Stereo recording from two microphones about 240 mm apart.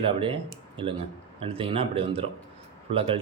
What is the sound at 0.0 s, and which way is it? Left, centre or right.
Speech, right.